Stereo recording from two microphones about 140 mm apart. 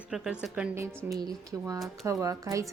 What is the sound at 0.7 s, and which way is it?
A woman's voice, 20° right (ahead or behind).